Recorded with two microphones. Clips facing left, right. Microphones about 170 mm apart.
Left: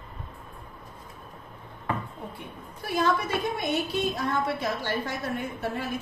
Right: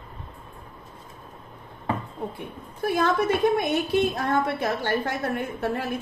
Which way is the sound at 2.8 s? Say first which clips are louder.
Right 3 dB; 55° right (ahead or behind).